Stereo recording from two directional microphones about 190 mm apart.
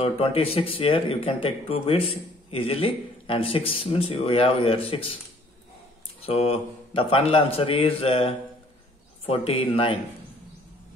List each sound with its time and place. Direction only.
0.0 s speech: 30° left (ahead or behind)
6.2 s speech: 30° left (ahead or behind)